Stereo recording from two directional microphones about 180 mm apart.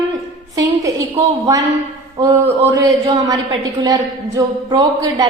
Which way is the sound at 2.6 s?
20° right (ahead or behind).